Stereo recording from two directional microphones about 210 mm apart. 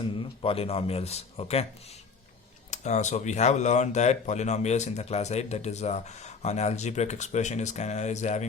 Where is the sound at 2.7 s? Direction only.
35° left (ahead or behind).